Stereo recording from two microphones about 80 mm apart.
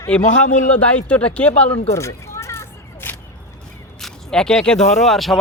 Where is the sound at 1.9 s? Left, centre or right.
Left.